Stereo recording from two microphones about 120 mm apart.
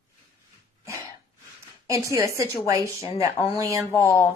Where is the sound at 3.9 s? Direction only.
25° left (ahead or behind).